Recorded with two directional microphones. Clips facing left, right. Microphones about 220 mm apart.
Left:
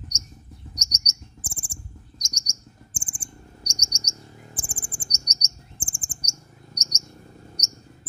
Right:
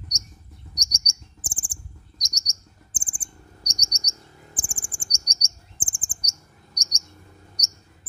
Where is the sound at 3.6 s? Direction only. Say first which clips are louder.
Left 1 dB; 15° right (ahead or behind).